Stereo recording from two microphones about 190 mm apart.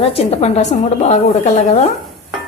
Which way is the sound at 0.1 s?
30° left (ahead or behind).